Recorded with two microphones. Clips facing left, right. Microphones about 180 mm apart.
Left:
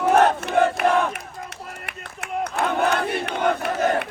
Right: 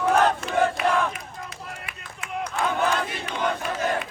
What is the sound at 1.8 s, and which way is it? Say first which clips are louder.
Battle cry: left 4 dB; 65° left (ahead or behind).